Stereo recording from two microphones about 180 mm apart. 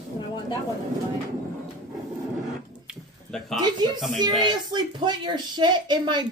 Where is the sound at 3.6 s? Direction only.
25° right (ahead or behind).